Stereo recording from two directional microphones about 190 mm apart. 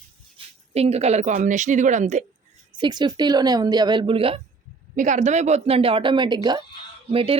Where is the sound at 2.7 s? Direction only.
25° right (ahead or behind).